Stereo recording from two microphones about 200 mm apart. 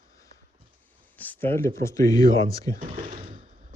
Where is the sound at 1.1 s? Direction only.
10° left (ahead or behind).